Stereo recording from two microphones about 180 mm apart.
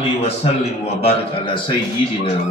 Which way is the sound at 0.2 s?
35° left (ahead or behind).